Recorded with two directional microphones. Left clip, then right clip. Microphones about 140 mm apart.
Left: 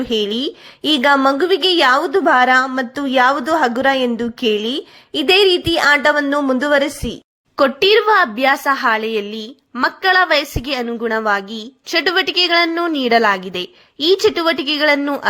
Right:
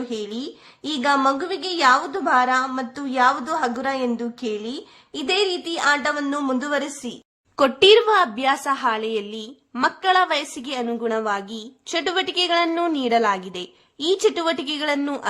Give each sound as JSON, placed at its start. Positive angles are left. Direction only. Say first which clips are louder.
{"t": 0.0, "sound": "a woman's voice", "louder": "left 11 dB", "side_deg": 30}
{"t": 7.5, "sound": "a woman's voice", "louder": "left 2 dB", "side_deg": 15}